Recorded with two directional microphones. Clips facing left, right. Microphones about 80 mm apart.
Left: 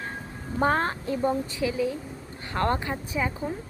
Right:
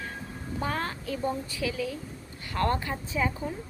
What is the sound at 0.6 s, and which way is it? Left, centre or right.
A woman's voice, left.